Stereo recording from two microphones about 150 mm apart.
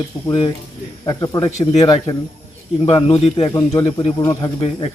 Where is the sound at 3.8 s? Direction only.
40° left (ahead or behind).